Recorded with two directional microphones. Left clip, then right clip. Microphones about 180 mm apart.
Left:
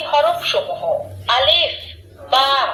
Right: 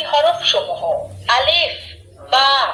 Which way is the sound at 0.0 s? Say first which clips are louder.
Right 1 dB; 10° right (ahead or behind).